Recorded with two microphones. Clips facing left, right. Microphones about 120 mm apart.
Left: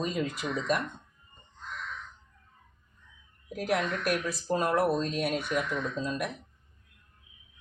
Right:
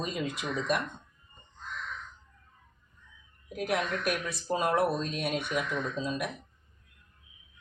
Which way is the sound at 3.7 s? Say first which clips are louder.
Left 2 dB; centre (ahead or behind).